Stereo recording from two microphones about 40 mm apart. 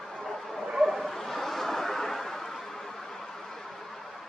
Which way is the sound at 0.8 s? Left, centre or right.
Centre.